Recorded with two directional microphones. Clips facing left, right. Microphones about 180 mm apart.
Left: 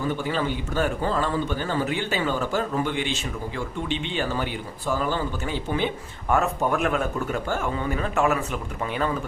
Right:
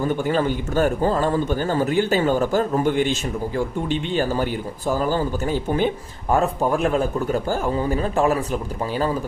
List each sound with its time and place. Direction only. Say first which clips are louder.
0.0 s a man's voice: right 5 dB; 45° right (ahead or behind)